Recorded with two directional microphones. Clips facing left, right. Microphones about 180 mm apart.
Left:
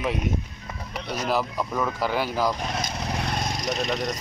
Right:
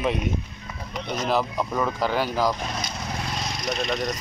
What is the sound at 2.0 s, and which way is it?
Speech, 10° left (ahead or behind).